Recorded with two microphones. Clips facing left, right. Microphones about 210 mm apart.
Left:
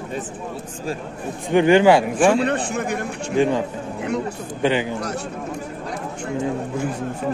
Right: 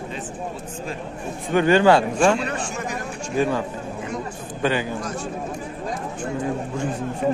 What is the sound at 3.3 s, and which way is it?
A man's voice, 20° left (ahead or behind).